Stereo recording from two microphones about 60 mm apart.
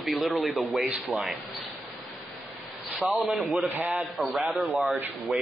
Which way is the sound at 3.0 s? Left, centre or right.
Centre.